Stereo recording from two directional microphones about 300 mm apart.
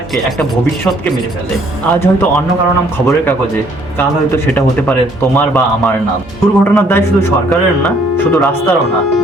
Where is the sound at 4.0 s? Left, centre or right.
Centre.